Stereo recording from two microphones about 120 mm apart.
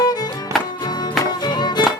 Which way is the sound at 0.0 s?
35° left (ahead or behind).